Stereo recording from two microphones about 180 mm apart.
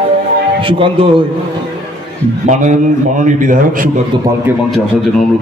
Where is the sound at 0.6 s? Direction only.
30° right (ahead or behind).